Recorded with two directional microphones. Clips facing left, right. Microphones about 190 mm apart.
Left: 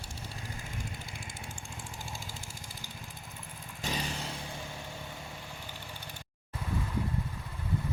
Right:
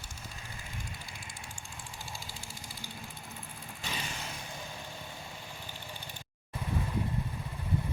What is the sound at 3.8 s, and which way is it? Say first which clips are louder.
Vehicle: left 5 dB; 40° left (ahead or behind).